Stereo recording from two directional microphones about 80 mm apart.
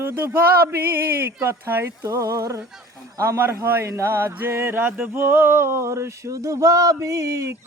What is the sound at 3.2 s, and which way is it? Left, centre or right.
Male singing, right.